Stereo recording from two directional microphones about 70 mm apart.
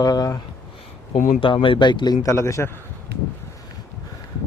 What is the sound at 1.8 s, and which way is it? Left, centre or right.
Speech, left.